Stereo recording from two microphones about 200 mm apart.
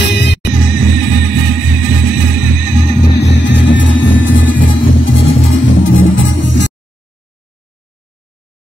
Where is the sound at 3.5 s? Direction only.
70° left (ahead or behind).